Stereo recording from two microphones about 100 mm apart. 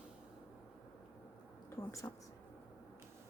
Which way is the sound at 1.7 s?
30° left (ahead or behind).